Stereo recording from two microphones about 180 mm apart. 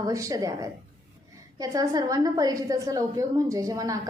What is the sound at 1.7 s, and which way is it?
A woman's voice, 20° right (ahead or behind).